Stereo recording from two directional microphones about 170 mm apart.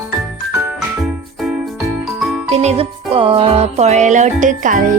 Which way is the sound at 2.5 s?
40° right (ahead or behind).